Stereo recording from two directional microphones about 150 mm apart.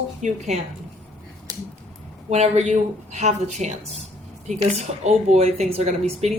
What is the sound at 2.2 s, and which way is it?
A woman's voice, 50° right (ahead or behind).